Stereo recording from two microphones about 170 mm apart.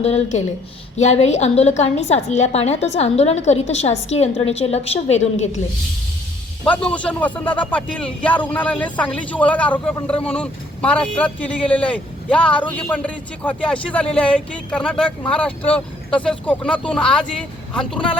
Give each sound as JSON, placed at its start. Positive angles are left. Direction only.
{"t": 0.0, "sound": "a woman's voice", "side_deg": 40}
{"t": 6.7, "sound": "speech", "side_deg": 5}